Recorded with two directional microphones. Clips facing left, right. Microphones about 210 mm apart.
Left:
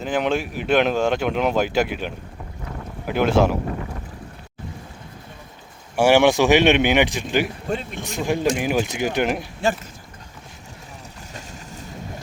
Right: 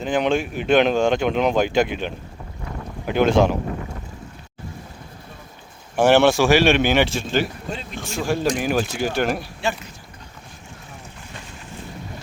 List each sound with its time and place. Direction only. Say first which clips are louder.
0.0 s speech: right 2 dB; 5° left (ahead or behind)
6.0 s speech: even; 10° left (ahead or behind)